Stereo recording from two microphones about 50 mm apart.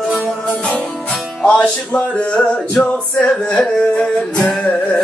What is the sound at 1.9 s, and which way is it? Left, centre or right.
Music, left.